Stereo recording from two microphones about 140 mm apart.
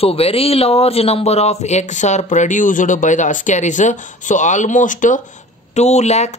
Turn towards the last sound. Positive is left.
turn(degrees=55)  # may be behind; listen again after turning